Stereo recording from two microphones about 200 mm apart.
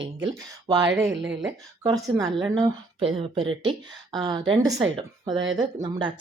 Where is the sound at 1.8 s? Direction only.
20° right (ahead or behind).